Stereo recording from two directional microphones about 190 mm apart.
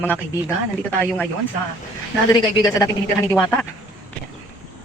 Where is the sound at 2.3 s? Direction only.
20° left (ahead or behind).